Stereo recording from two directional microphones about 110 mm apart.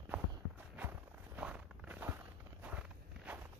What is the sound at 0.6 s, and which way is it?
Walk, 15° right (ahead or behind).